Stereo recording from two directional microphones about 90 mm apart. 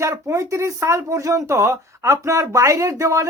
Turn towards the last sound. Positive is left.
turn(degrees=-35)  # may be behind; listen again after turning